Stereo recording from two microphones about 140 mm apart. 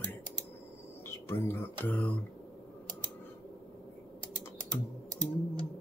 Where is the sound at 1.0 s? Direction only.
15° left (ahead or behind).